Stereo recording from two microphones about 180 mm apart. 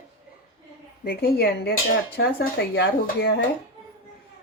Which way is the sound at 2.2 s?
75° left (ahead or behind).